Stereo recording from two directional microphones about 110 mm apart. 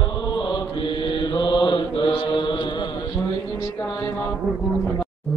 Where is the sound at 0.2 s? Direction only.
40° left (ahead or behind).